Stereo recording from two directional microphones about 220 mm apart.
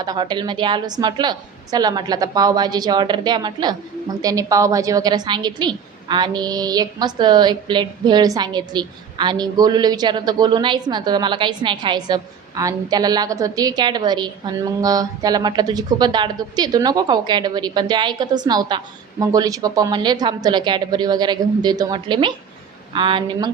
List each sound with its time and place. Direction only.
0.0 s a woman's voice: 20° right (ahead or behind)